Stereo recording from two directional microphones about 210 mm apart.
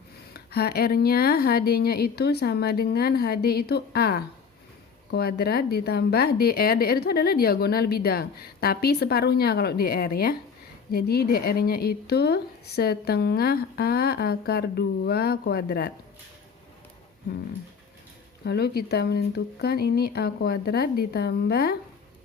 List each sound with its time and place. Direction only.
0.3 s a woman's voice: 50° left (ahead or behind)
18.4 s a woman's voice: 50° left (ahead or behind)